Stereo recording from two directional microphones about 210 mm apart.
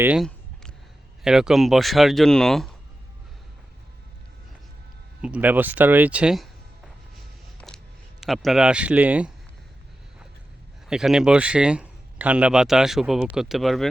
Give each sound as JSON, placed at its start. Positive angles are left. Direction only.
{"t": 0.0, "sound": "a man's voice", "side_deg": -5}
{"t": 5.2, "sound": "speech", "side_deg": -5}
{"t": 8.2, "sound": "a man's voice", "side_deg": 0}
{"t": 10.8, "sound": "a man's voice", "side_deg": -5}